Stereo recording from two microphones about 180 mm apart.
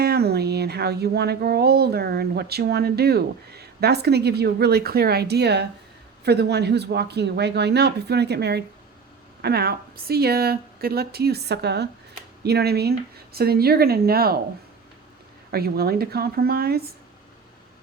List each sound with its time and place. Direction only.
0.0 s speech: 60° right (ahead or behind)
15.5 s speech: 60° right (ahead or behind)